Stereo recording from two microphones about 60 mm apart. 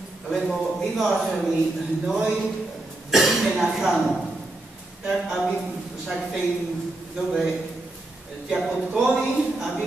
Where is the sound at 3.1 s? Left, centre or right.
Centre.